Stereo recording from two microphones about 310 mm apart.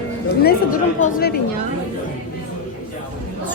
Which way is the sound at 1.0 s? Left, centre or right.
Left.